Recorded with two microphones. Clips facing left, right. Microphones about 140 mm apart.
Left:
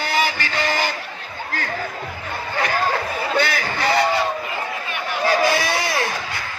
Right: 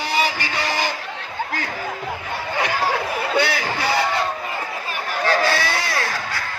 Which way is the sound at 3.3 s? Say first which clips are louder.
Even; 10° right (ahead or behind).